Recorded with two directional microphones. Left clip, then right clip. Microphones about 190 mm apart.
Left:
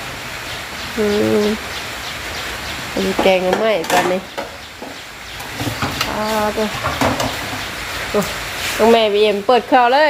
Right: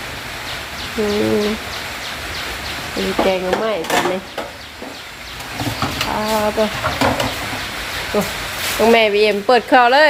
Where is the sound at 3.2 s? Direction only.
25° left (ahead or behind).